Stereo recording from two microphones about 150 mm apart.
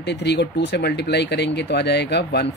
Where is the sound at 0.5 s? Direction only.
90° left.